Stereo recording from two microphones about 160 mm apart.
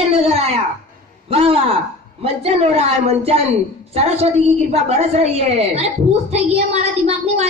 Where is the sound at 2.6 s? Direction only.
40° right (ahead or behind).